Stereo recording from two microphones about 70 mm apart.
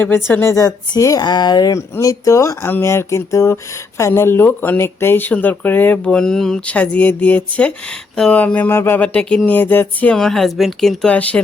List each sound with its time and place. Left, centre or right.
0.3 s speech: left
0.5 s speech: left
1.7 s speech: left
6.1 s speech: centre
6.7 s speech: centre
8.1 s speech: centre
8.4 s speech: left
8.7 s speech: left
9.0 s speech: left
10.2 s speech: centre
11.1 s speech: centre